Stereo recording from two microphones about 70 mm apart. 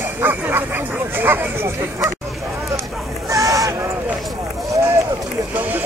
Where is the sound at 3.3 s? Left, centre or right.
Right.